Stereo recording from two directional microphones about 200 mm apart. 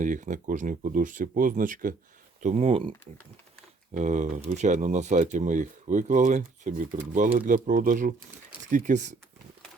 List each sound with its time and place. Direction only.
0.0 s speech: 40° right (ahead or behind)
3.9 s speech: 35° right (ahead or behind)